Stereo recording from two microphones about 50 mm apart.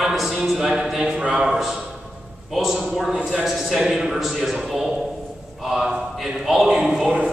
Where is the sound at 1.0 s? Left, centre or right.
Centre.